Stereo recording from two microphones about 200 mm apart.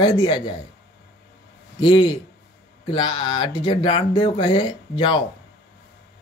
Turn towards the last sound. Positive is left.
turn(degrees=25)  # may be behind; listen again after turning